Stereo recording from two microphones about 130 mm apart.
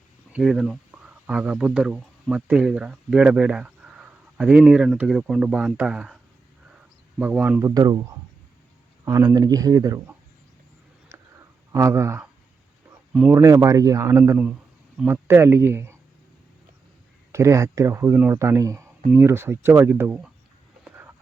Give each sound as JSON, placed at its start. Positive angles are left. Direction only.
{"t": 0.3, "sound": "speech", "side_deg": -5}
{"t": 7.2, "sound": "speech", "side_deg": -10}
{"t": 7.6, "sound": "speech", "side_deg": -30}
{"t": 9.0, "sound": "speech", "side_deg": -30}
{"t": 11.1, "sound": "a sound", "side_deg": -20}
{"t": 11.7, "sound": "speech", "side_deg": -20}
{"t": 13.3, "sound": "speech", "side_deg": -20}
{"t": 17.3, "sound": "speech", "side_deg": -25}
{"t": 20.8, "sound": "a sound", "side_deg": -15}